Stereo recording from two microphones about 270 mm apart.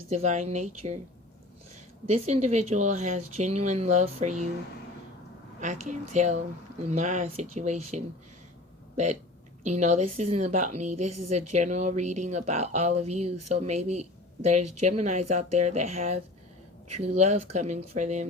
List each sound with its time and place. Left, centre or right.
0.1 s speech: right
2.0 s speech: right
5.5 s speech: right
9.6 s speech: right